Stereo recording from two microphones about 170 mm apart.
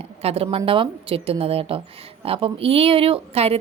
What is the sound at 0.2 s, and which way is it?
A woman's voice, 35° right (ahead or behind).